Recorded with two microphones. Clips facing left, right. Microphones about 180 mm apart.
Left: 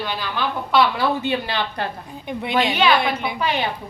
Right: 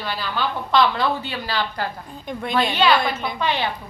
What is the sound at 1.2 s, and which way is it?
A woman's voice, 20° left (ahead or behind).